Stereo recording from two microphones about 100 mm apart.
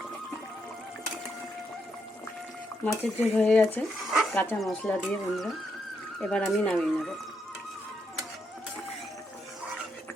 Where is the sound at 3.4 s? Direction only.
10° left (ahead or behind).